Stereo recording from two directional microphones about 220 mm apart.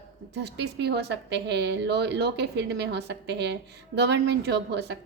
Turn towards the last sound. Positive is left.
turn(degrees=-50)  # may be behind; listen again after turning